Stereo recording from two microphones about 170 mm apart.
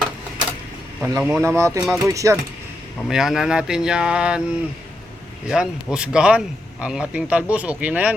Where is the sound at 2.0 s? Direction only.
20° right (ahead or behind).